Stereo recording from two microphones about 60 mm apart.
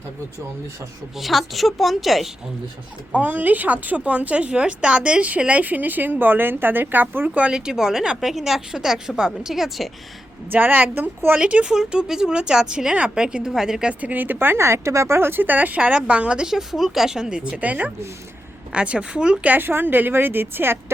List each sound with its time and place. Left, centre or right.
1.1 s a woman's voice: centre
3.1 s speech: right
7.3 s a woman's voice: centre
10.5 s a woman's voice: right
11.3 s a woman's voice: centre
14.0 s speech: right; by 17.6 s centre
17.6 s a woman's voice: right
19.5 s a woman's voice: right